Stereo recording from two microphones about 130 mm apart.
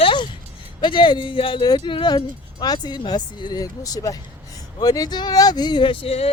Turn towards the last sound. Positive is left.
turn(degrees=50)  # may be behind; listen again after turning